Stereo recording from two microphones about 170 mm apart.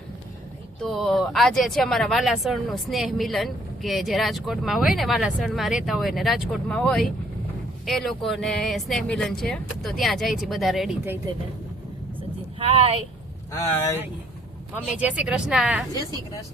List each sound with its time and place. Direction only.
0.8 s speech: centre (ahead or behind)
12.5 s speech: 35° right (ahead or behind)
13.5 s speech: 20° left (ahead or behind)
14.9 s speech: 5° right (ahead or behind)